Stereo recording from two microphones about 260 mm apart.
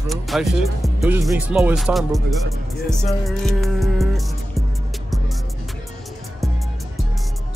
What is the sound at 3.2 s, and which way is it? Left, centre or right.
Music, centre.